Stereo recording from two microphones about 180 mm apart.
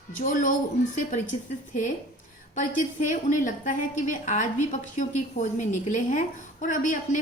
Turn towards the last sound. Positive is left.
turn(degrees=45)  # may be behind; listen again after turning